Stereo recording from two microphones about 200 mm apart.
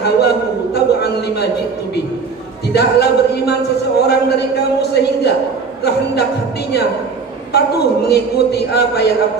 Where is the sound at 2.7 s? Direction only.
55° left (ahead or behind).